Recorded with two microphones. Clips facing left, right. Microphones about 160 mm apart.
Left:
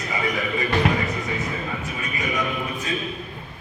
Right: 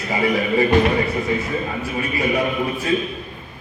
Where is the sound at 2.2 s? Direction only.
35° right (ahead or behind).